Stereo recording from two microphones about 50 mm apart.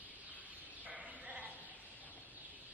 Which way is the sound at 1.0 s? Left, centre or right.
Centre.